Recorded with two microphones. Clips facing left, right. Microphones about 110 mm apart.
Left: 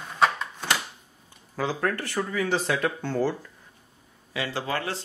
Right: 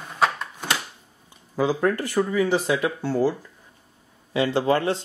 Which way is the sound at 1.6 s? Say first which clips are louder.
Right 6 dB; 15° right (ahead or behind).